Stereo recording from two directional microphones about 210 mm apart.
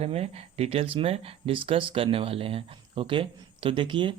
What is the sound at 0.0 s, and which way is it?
Speech, 30° right (ahead or behind).